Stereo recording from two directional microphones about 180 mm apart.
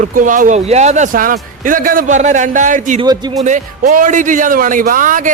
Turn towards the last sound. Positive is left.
turn(degrees=-50)  # may be behind; listen again after turning